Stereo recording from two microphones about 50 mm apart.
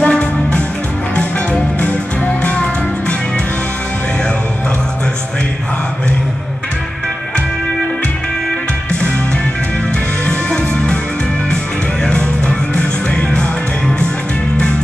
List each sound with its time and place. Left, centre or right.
0.0 s music: left
10.2 s music: centre
12.0 s music: centre